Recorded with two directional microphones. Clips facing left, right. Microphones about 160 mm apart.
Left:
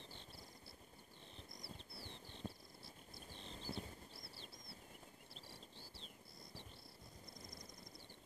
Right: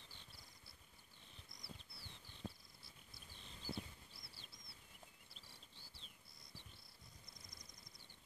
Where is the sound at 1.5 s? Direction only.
25° left (ahead or behind).